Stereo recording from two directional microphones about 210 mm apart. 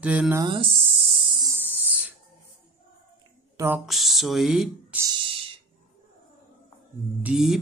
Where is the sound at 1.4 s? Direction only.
15° right (ahead or behind).